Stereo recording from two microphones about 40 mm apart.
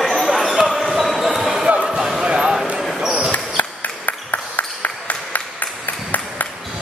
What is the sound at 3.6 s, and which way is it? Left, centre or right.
Ping, left.